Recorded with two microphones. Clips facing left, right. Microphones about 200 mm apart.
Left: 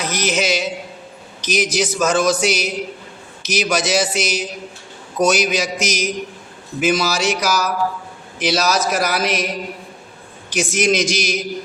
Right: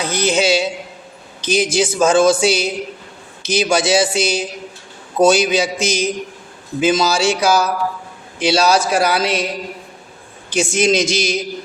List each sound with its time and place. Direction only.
0.0 s speech: 30° right (ahead or behind)
10.5 s speech: 25° right (ahead or behind)